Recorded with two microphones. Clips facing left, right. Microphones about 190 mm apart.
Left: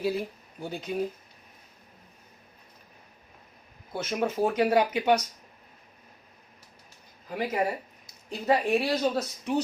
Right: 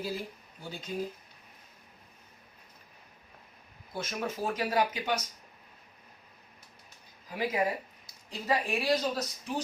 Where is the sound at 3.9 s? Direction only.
65° left (ahead or behind).